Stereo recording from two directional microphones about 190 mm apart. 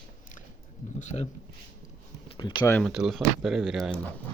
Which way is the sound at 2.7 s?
Centre (ahead or behind).